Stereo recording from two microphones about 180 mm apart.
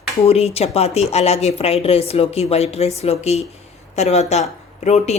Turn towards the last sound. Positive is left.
turn(degrees=40)  # may be behind; listen again after turning